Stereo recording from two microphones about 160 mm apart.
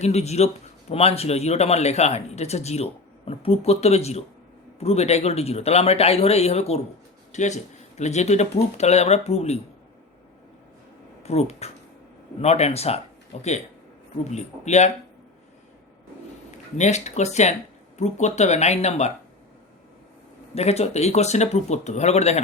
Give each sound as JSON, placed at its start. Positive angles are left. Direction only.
{"t": 0.0, "sound": "a man's voice", "side_deg": 45}
{"t": 11.2, "sound": "a man's voice", "side_deg": 40}
{"t": 14.3, "sound": "speech", "side_deg": 45}
{"t": 16.7, "sound": "speech", "side_deg": 45}
{"t": 20.6, "sound": "speech", "side_deg": 40}